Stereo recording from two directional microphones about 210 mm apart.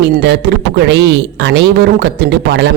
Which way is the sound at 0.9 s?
55° right (ahead or behind).